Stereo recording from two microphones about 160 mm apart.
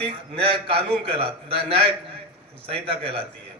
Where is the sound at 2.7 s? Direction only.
35° right (ahead or behind).